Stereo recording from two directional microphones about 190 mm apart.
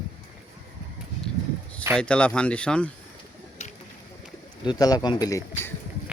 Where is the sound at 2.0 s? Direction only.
5° left (ahead or behind).